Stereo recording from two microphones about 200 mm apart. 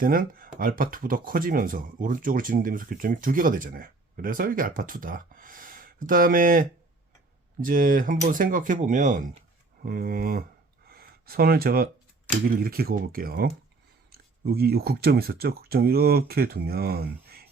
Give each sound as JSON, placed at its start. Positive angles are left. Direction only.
{"t": 0.0, "sound": "speech", "side_deg": -45}
{"t": 10.8, "sound": "a sound", "side_deg": -50}
{"t": 12.5, "sound": "speech", "side_deg": -50}